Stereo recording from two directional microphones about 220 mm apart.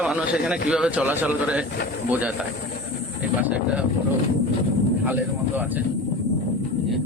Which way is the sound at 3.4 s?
5° right (ahead or behind).